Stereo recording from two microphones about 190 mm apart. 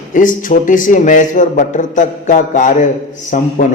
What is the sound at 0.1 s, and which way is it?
A man's voice, 45° left (ahead or behind).